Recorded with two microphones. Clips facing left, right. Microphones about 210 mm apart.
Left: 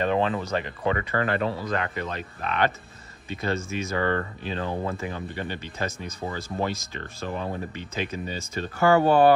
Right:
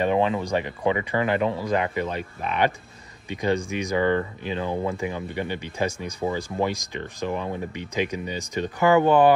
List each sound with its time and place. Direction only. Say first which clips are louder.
0.0 s speech: right 2 dB; 15° right (ahead or behind)